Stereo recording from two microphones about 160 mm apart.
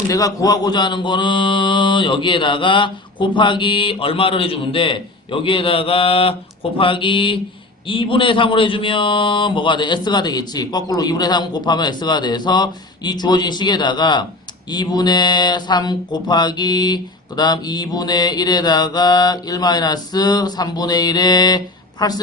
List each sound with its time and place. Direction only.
0.1 s speech: 20° left (ahead or behind)